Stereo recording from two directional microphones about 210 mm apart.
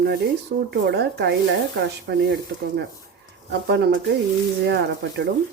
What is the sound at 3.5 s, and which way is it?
Speech, 50° right (ahead or behind).